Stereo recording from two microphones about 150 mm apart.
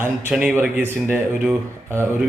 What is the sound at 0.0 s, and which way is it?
Speech, 10° right (ahead or behind).